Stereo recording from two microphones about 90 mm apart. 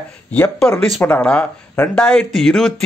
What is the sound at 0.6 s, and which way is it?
Speech, 5° left (ahead or behind).